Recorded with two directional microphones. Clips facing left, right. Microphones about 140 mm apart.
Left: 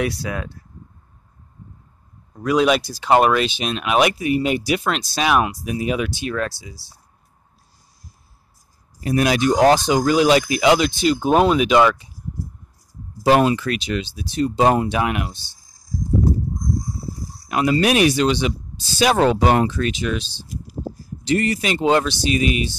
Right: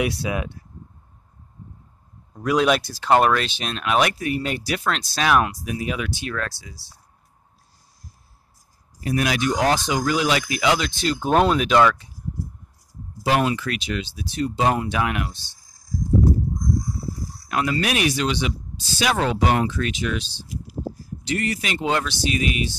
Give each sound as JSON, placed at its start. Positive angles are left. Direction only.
{"t": 0.0, "sound": "speech", "side_deg": -15}
{"t": 2.3, "sound": "speech", "side_deg": 0}
{"t": 9.0, "sound": "speech", "side_deg": 30}
{"t": 11.0, "sound": "speech", "side_deg": 10}
{"t": 13.2, "sound": "speech", "side_deg": 35}
{"t": 16.7, "sound": "a sound", "side_deg": 25}
{"t": 17.7, "sound": "speech", "side_deg": 30}